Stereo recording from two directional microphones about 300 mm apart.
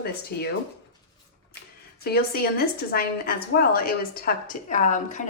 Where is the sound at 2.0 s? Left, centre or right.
Left.